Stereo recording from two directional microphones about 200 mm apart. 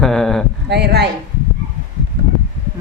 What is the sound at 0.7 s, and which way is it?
Speech, 55° right (ahead or behind).